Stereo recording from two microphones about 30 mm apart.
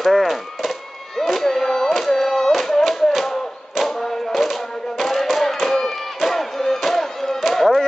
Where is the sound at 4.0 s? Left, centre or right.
Centre.